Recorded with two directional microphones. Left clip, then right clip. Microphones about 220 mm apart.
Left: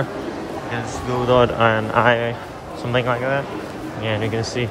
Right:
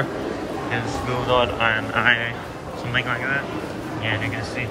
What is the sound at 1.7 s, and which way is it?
Speech, 25° left (ahead or behind).